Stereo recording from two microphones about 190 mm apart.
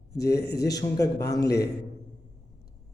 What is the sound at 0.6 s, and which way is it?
Speech, 20° left (ahead or behind).